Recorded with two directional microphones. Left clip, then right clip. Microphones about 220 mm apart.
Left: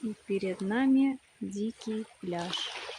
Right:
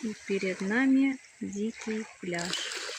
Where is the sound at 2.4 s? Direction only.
55° right (ahead or behind).